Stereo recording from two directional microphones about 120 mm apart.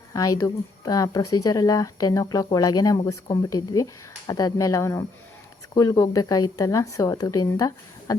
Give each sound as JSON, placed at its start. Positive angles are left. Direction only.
{"t": 0.1, "sound": "a woman's voice", "side_deg": 30}